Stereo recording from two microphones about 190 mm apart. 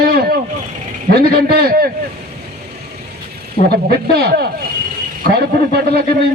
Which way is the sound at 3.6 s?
45° left (ahead or behind).